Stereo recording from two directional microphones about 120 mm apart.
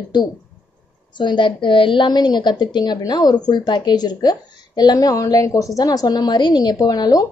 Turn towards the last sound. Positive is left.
turn(degrees=30)  # may be behind; listen again after turning